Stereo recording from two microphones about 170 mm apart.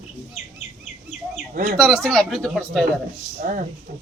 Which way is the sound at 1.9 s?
5° left (ahead or behind).